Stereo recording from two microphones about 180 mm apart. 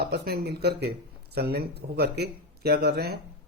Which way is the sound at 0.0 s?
65° right (ahead or behind).